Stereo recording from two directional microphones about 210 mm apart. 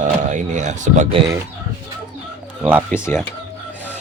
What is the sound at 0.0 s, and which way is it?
Speech, 35° right (ahead or behind).